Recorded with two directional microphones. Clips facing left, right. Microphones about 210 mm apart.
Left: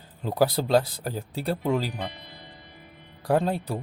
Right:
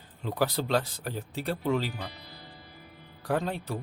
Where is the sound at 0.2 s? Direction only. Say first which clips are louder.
Left 5 dB; 40° left (ahead or behind).